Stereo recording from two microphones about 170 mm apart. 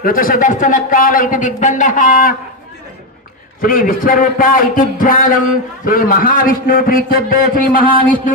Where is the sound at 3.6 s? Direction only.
55° left (ahead or behind).